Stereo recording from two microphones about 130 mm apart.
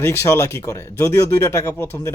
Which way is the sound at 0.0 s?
20° left (ahead or behind).